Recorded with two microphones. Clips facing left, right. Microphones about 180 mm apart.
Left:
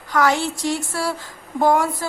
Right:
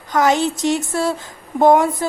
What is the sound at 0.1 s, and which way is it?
Speech, 20° right (ahead or behind).